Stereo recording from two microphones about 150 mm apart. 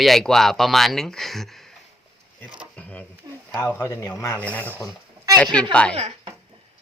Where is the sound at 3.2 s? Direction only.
25° right (ahead or behind).